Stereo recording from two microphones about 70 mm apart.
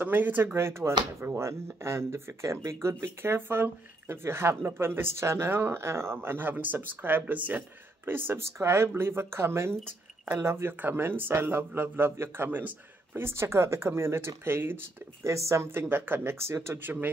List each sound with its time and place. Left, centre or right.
0.0 s speech: right
0.6 s speech: right
13.1 s speech: right
15.2 s speech: right